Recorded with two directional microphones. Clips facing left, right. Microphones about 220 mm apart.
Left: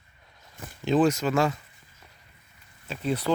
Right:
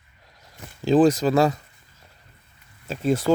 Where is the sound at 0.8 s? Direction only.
35° right (ahead or behind).